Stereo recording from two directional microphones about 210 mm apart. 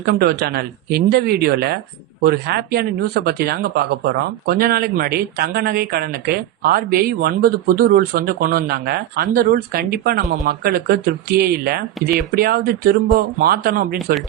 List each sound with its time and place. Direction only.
0.0 s speech: 50° right (ahead or behind)